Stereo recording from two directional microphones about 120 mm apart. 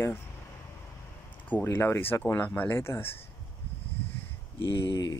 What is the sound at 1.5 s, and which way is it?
Speech, 20° left (ahead or behind).